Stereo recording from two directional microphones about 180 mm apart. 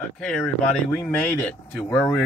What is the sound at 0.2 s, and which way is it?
Speech, 5° left (ahead or behind).